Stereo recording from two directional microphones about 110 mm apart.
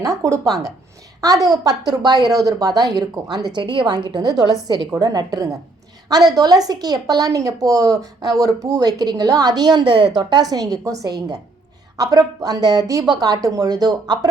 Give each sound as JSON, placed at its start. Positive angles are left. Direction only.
{"t": 0.3, "sound": "speech", "side_deg": -30}